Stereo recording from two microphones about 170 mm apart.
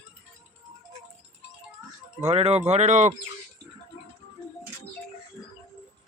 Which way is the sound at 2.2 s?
35° right (ahead or behind).